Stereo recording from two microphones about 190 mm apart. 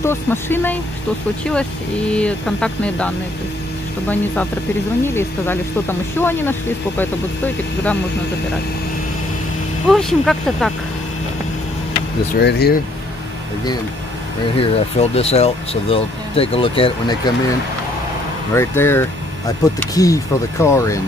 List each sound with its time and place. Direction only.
0.0 s speech: 10° left (ahead or behind)
5.0 s speech: 10° left (ahead or behind)
9.8 s speech: centre (ahead or behind)
12.4 s speech: 60° left (ahead or behind)
14.6 s speech: 30° left (ahead or behind)
18.5 s speech: 15° left (ahead or behind)